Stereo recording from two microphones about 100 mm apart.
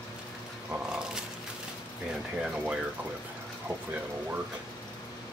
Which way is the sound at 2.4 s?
10° right (ahead or behind).